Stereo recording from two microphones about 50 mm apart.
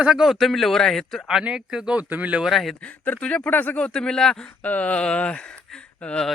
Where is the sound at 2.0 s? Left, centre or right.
Right.